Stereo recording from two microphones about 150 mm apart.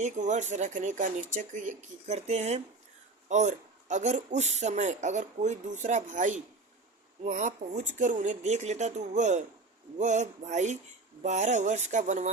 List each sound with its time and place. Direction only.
0.0 s speech: 55° right (ahead or behind)